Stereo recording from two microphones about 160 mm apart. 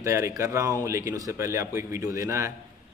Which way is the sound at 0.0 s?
20° right (ahead or behind).